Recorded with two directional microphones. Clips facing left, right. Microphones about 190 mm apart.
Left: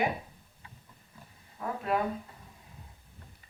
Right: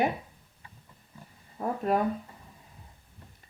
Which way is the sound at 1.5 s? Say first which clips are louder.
Right 4 dB; 45° right (ahead or behind).